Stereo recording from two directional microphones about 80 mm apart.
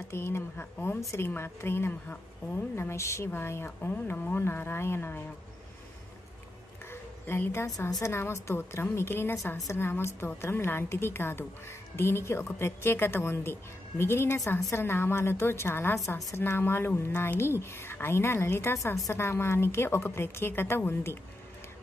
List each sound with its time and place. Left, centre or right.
0.1 s a woman's voice: left
6.9 s a sound: left
8.0 s a woman's voice: left
19.1 s a woman's voice: left